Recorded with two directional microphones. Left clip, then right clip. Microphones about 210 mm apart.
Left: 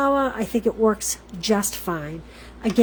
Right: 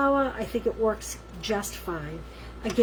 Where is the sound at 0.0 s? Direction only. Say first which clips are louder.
Left 3 dB; 55° left (ahead or behind).